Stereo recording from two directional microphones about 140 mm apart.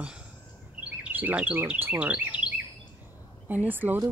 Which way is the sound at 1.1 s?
10° right (ahead or behind).